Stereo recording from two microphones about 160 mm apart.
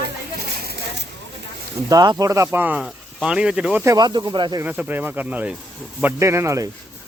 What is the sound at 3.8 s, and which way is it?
Speech, 20° right (ahead or behind).